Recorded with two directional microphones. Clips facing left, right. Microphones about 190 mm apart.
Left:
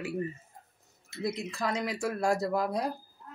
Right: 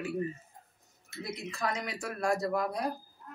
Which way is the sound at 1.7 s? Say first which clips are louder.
Left 5 dB; 30° left (ahead or behind).